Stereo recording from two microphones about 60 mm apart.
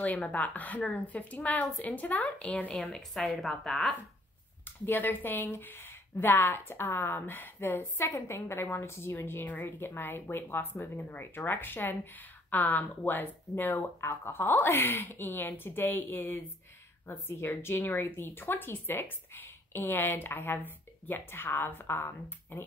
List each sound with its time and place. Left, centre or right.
0.0 s a woman's voice: left; by 3.9 s centre
4.8 s speech: left